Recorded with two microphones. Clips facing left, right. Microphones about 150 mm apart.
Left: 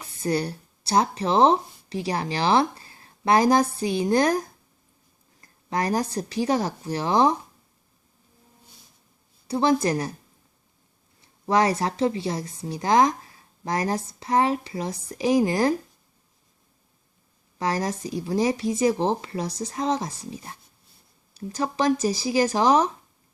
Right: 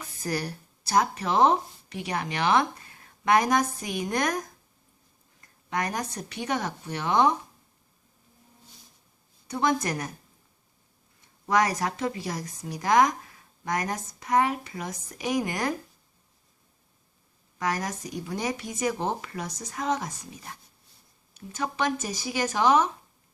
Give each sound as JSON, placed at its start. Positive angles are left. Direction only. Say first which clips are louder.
{"t": 0.0, "sound": "speech", "louder": "left 6 dB", "side_deg": 30}
{"t": 9.5, "sound": "speech", "louder": "left 5 dB", "side_deg": 30}
{"t": 11.2, "sound": "a woman's voice", "louder": "left 3 dB", "side_deg": 30}
{"t": 17.6, "sound": "speech", "louder": "left 4 dB", "side_deg": 30}